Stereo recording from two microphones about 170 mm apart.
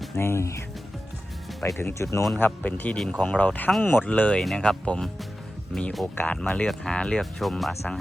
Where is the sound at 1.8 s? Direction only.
15° left (ahead or behind).